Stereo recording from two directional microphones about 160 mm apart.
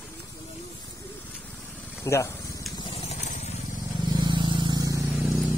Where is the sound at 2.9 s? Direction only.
40° left (ahead or behind).